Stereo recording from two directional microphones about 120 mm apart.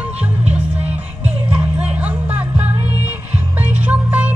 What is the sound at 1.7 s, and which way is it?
Music, 10° right (ahead or behind).